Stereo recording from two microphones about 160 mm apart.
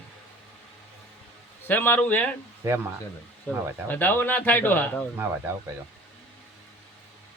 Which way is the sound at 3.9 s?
10° left (ahead or behind).